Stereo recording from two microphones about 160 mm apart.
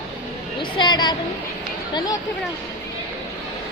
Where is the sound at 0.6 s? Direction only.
30° left (ahead or behind).